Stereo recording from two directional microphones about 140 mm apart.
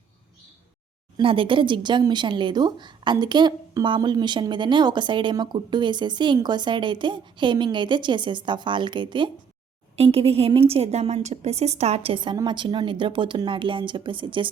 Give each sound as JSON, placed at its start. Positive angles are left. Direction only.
{"t": 1.1, "sound": "speech", "side_deg": -40}